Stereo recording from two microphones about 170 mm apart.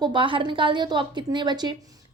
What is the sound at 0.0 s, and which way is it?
A child's voice, 30° right (ahead or behind).